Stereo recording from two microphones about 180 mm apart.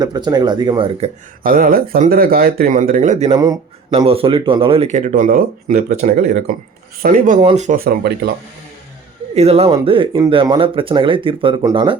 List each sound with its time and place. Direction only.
0.0 s speech: 20° right (ahead or behind)
1.5 s speech: 55° right (ahead or behind)
3.3 s speech: 20° right (ahead or behind); by 7.8 s 40° right (ahead or behind)
7.8 s speech: 60° right (ahead or behind)
9.3 s speech: 35° right (ahead or behind)